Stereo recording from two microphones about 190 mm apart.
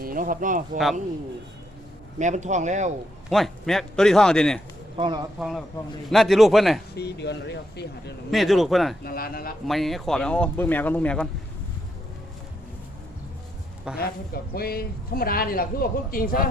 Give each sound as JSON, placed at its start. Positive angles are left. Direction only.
{"t": 0.0, "sound": "speech", "side_deg": -45}
{"t": 2.1, "sound": "speech", "side_deg": -40}
{"t": 3.2, "sound": "speech", "side_deg": 0}
{"t": 4.9, "sound": "speech", "side_deg": -25}
{"t": 5.4, "sound": "speech", "side_deg": 0}
{"t": 6.9, "sound": "speech", "side_deg": 60}
{"t": 8.3, "sound": "speech", "side_deg": 0}
{"t": 9.0, "sound": "speech", "side_deg": 50}
{"t": 9.6, "sound": "speech", "side_deg": 0}
{"t": 13.9, "sound": "speech", "side_deg": 55}